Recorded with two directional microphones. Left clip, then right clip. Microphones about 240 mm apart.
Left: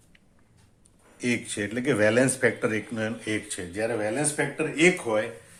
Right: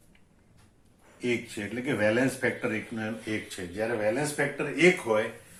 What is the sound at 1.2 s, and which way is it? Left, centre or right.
Speech, left.